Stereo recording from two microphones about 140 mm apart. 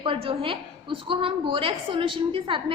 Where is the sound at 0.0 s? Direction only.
40° right (ahead or behind).